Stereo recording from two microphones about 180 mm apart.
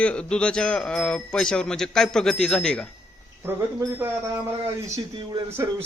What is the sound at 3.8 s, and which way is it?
Speech, 15° right (ahead or behind).